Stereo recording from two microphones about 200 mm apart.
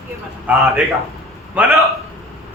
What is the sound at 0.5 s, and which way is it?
Speech, 10° right (ahead or behind).